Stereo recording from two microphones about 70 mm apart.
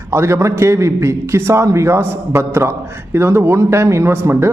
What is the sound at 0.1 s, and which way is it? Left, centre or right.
A man's voice, right.